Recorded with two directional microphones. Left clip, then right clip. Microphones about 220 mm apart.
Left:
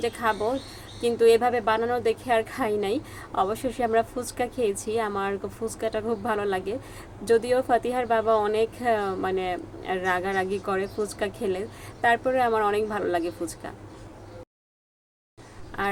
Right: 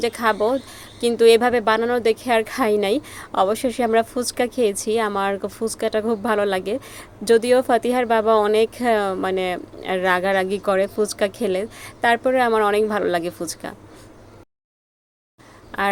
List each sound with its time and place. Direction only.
0.0 s speech: 45° right (ahead or behind)
15.7 s speech: 45° right (ahead or behind)